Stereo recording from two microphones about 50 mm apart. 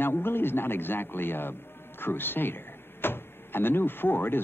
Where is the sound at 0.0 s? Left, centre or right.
Left.